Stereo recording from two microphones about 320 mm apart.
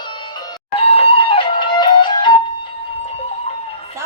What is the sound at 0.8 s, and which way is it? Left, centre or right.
Music, centre.